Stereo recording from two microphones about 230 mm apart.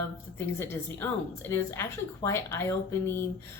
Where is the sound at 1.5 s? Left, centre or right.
Centre.